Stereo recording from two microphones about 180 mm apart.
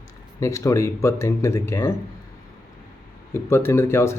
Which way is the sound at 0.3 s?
15° left (ahead or behind).